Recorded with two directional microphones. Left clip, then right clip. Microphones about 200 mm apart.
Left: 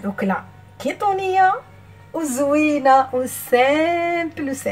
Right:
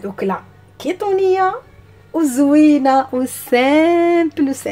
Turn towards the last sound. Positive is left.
turn(degrees=-45)  # may be behind; listen again after turning